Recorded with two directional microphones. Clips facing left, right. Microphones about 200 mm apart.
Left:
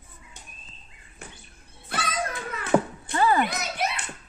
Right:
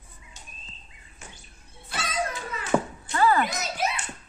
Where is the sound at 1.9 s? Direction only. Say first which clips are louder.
Even; 55° left (ahead or behind).